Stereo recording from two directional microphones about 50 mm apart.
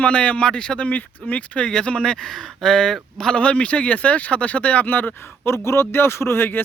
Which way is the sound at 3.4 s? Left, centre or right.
Left.